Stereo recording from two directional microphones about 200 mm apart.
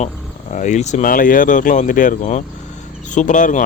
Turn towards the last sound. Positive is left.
turn(degrees=40)  # may be behind; listen again after turning